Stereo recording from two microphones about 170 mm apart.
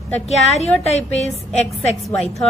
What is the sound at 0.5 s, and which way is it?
Speech, 40° left (ahead or behind).